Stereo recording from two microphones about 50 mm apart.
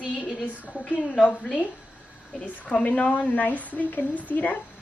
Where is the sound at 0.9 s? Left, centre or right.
Left.